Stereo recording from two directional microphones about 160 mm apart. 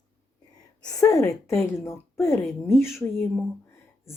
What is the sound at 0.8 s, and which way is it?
A woman's voice, 20° left (ahead or behind).